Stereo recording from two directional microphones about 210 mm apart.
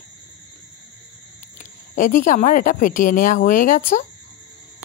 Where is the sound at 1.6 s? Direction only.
40° left (ahead or behind).